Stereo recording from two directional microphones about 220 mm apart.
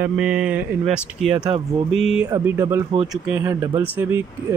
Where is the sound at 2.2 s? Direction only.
15° right (ahead or behind).